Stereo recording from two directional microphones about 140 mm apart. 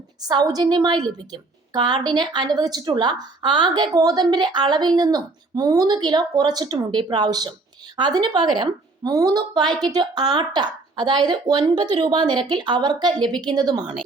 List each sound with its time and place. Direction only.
0.2 s a woman's voice: 30° right (ahead or behind)